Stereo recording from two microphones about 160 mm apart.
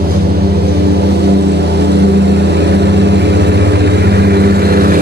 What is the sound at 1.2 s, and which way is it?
Vehicle, 90° right.